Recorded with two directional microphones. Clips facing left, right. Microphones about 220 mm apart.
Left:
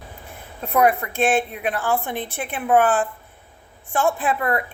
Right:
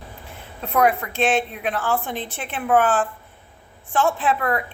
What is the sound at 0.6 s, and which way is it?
A woman's voice, 10° left (ahead or behind).